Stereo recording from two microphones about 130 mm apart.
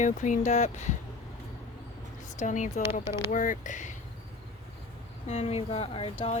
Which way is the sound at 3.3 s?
90° left.